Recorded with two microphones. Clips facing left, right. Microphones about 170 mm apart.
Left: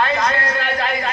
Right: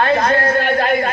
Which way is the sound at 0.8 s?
50° right (ahead or behind).